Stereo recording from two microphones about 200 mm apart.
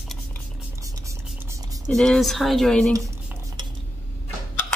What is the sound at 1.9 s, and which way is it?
Speech, 5° left (ahead or behind).